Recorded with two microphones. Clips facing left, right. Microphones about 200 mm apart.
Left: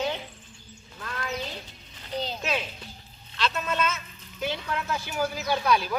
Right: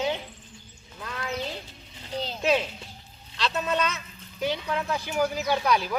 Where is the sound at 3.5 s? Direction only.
20° right (ahead or behind).